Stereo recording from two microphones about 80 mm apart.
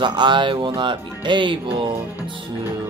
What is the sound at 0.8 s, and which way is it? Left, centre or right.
Music, right.